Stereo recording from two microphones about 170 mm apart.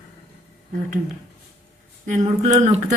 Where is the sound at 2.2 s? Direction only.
40° right (ahead or behind).